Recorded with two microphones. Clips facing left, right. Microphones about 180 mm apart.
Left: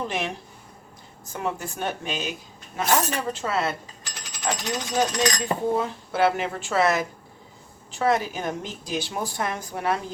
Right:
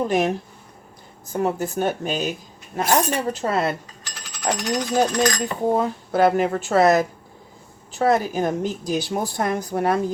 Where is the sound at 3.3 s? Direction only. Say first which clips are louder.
Right 4 dB; 40° right (ahead or behind).